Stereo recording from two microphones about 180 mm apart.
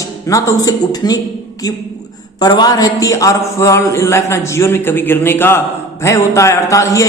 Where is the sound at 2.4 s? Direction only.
20° left (ahead or behind).